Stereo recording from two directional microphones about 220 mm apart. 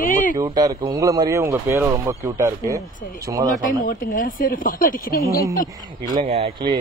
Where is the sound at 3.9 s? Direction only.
40° left (ahead or behind).